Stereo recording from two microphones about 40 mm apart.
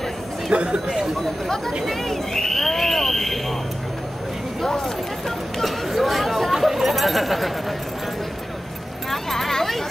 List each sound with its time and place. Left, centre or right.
0.5 s speech: right
1.9 s speech: centre
4.6 s speech: centre
5.6 s speech: centre
9.1 s speech: centre